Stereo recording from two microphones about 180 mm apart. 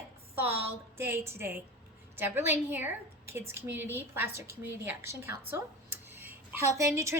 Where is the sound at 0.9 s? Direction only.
15° right (ahead or behind).